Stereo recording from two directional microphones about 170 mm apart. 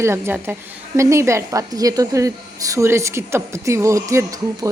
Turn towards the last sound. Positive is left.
turn(degrees=-15)  # may be behind; listen again after turning